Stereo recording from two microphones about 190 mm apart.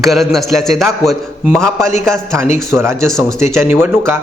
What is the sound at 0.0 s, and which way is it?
A man's voice, centre (ahead or behind).